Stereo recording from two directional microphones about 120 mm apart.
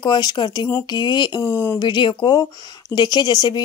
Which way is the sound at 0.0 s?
35° left (ahead or behind).